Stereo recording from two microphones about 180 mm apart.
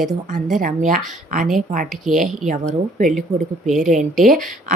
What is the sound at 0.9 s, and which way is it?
Speech, 45° right (ahead or behind).